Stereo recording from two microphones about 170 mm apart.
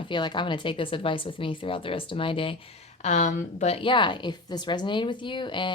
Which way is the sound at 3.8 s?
30° left (ahead or behind).